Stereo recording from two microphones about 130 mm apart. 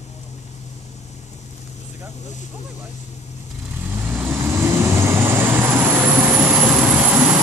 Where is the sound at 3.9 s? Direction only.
15° right (ahead or behind).